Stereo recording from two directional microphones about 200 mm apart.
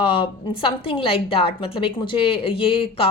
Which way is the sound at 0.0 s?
25° left (ahead or behind).